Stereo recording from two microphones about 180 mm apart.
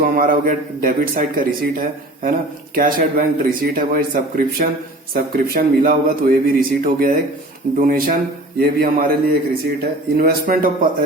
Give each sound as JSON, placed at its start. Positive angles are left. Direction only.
{"t": 0.0, "sound": "a man's voice", "side_deg": -50}